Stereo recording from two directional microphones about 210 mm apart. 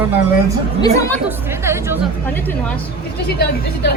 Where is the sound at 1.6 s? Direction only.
10° right (ahead or behind).